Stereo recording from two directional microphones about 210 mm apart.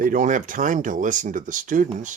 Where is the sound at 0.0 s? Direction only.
40° right (ahead or behind).